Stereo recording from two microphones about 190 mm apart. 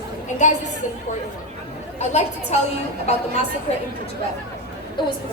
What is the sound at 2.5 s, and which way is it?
Speech, 35° left (ahead or behind).